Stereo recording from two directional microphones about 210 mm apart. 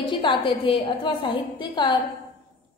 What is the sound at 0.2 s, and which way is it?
A woman's voice, 25° left (ahead or behind).